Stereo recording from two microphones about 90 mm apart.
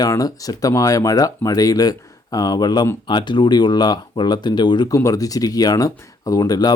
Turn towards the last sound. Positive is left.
turn(degrees=45)  # may be behind; listen again after turning